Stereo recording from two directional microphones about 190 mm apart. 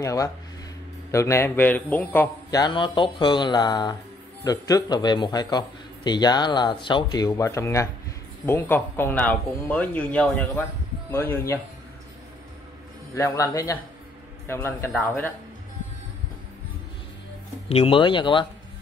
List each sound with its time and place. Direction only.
0.0 s speech: 15° left (ahead or behind)
2.6 s speech: 25° left (ahead or behind)
13.1 s speech: 15° left (ahead or behind)
17.6 s speech: 30° left (ahead or behind)